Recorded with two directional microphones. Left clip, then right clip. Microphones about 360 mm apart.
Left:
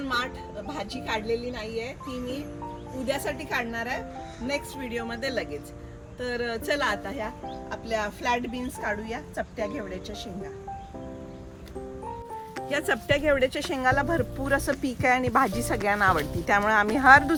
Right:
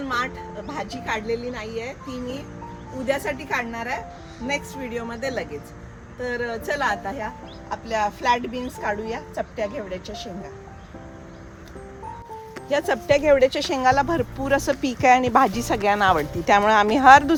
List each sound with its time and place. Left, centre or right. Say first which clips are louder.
0.7 s speech: right 3 dB; centre
12.6 s speech: right 5 dB; centre